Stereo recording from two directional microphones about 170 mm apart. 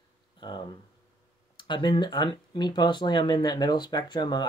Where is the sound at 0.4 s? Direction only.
30° left (ahead or behind).